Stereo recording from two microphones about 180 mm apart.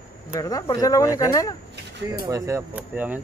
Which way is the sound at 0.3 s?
20° left (ahead or behind).